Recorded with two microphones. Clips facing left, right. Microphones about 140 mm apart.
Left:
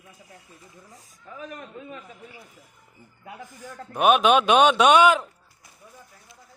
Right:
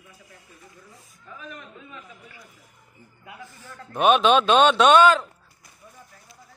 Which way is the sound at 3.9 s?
10° left (ahead or behind).